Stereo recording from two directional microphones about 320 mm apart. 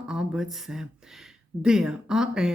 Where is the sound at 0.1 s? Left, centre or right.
Centre.